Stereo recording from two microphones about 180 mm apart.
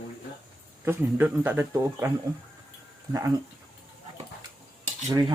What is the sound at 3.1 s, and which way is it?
Speech, 20° right (ahead or behind).